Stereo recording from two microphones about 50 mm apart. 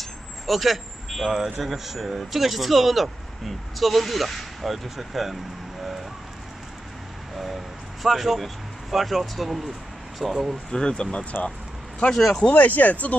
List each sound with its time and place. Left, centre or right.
0.0 s speech: centre
7.3 s a sound: centre
8.9 s speech: centre
10.7 s speech: centre
12.1 s speech: centre
12.4 s speech: left